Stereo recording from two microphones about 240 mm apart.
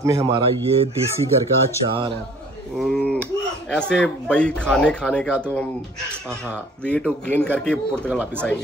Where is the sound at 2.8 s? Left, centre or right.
Centre.